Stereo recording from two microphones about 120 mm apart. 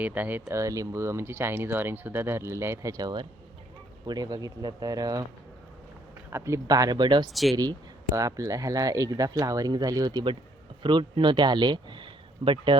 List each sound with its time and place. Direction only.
0.0 s speech: 15° right (ahead or behind)
0.4 s speech: 25° right (ahead or behind)
6.3 s speech: 25° right (ahead or behind)
8.1 s speech: 30° right (ahead or behind); by 12.8 s 45° right (ahead or behind)